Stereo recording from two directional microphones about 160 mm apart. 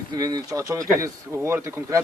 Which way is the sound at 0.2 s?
25° right (ahead or behind).